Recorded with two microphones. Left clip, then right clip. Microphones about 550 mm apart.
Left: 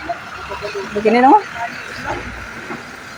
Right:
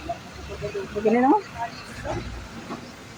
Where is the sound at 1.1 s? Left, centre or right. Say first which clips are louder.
Left 10 dB; right.